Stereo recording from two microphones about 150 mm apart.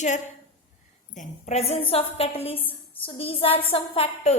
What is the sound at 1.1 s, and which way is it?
A woman's voice, 55° left (ahead or behind).